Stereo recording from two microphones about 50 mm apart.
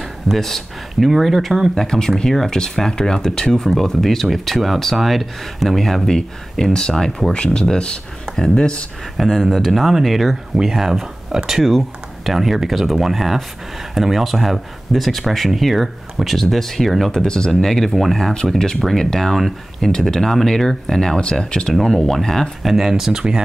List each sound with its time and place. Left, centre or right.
0.3 s speech: centre
1.8 s speech: centre
9.1 s speech: centre
22.7 s speech: centre